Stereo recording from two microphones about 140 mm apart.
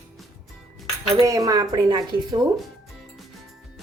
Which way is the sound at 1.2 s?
25° right (ahead or behind).